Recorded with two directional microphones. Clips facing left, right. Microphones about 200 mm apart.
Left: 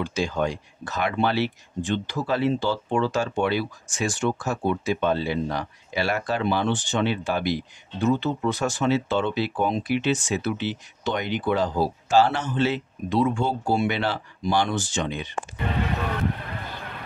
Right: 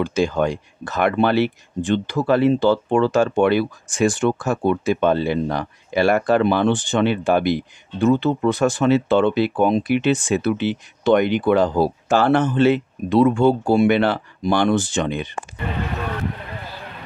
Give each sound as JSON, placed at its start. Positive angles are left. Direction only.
{"t": 0.0, "sound": "speech", "side_deg": -55}